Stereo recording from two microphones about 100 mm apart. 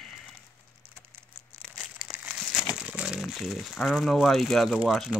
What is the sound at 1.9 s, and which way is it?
Crumpling, 5° right (ahead or behind).